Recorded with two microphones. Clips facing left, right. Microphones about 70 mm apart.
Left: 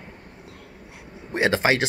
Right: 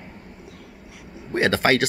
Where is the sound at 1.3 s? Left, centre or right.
Centre.